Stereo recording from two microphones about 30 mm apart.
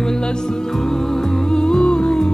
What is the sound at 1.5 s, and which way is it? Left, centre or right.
Music, left.